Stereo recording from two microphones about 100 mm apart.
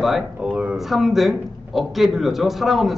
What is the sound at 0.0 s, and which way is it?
Speech, centre (ahead or behind).